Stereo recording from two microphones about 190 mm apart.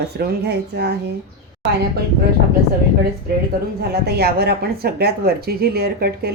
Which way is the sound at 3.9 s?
55° right (ahead or behind).